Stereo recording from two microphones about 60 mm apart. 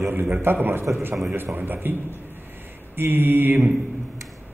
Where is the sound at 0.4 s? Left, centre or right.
Right.